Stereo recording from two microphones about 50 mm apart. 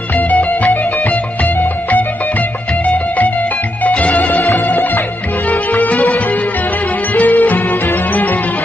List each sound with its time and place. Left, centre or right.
0.1 s music: left